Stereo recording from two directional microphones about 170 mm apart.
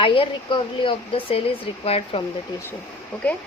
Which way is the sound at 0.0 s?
30° left (ahead or behind).